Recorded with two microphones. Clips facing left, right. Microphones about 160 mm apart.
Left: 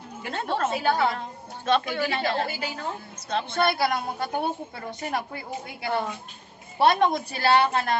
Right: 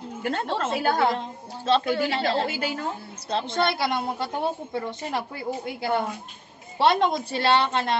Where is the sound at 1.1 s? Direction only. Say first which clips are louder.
Right 3 dB; 30° right (ahead or behind).